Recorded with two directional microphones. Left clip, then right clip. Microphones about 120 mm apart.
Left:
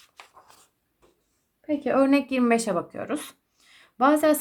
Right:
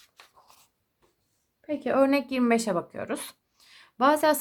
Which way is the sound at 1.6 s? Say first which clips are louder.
Left 1 dB; 25° right (ahead or behind).